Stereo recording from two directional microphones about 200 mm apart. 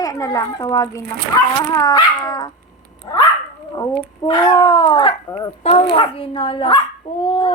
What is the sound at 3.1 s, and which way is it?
Dog, 25° left (ahead or behind).